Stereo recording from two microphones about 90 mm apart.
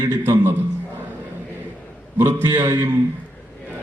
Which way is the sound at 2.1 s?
25° right (ahead or behind).